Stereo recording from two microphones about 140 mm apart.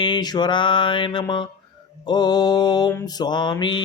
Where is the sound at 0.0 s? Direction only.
30° left (ahead or behind).